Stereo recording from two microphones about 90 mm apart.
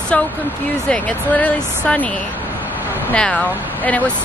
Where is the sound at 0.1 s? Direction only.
15° left (ahead or behind).